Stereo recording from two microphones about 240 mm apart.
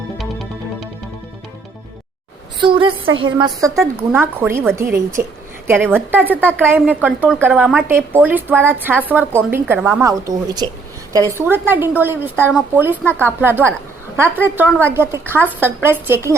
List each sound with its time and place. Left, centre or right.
2.6 s a woman's voice: centre
3.1 s a woman's voice: right
3.3 s a woman's voice: centre
5.2 s a woman's voice: right
5.6 s a woman's voice: centre
13.1 s speech: centre
13.4 s a woman's voice: centre